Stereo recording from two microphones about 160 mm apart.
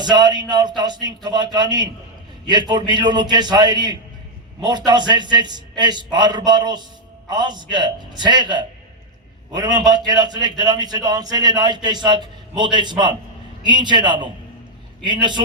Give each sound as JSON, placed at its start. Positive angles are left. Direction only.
{"t": 0.0, "sound": "a man's voice", "side_deg": -25}